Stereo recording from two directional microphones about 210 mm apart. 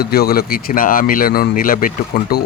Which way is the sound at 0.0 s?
45° left (ahead or behind).